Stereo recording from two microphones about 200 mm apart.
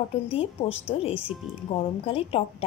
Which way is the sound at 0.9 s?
25° left (ahead or behind).